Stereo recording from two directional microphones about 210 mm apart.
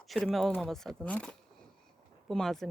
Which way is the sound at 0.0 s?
Centre (ahead or behind).